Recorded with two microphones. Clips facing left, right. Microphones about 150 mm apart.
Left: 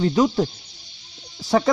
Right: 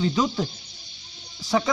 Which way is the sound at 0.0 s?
50° left (ahead or behind).